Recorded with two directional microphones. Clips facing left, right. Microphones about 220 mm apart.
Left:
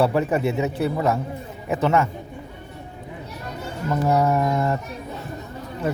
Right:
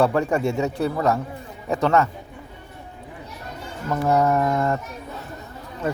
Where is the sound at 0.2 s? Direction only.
20° left (ahead or behind).